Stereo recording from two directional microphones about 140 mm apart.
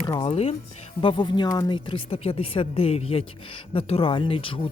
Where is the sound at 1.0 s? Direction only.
35° left (ahead or behind).